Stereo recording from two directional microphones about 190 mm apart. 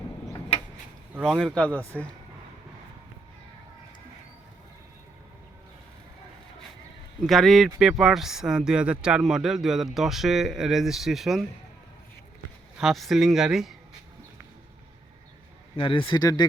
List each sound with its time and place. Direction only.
1.2 s speech: centre (ahead or behind)
7.2 s speech: centre (ahead or behind)
12.8 s speech: centre (ahead or behind)
15.7 s speech: 25° left (ahead or behind)